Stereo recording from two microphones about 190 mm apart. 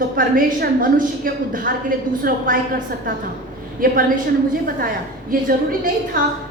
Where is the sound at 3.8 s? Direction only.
50° right (ahead or behind).